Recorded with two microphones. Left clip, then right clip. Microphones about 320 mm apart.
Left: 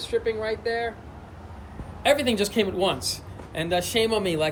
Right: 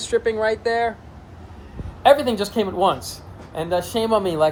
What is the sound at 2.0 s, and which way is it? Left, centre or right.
Speech, centre.